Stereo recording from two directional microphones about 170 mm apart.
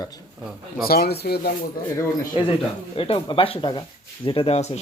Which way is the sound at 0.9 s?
65° left (ahead or behind).